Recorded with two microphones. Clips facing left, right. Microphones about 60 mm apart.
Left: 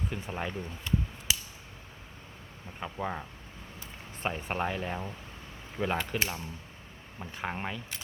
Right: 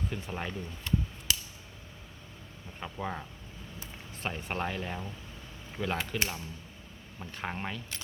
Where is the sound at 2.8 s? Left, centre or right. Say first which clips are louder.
Left 2 dB; centre.